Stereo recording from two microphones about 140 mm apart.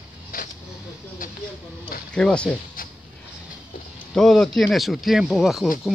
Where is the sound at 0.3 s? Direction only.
85° left.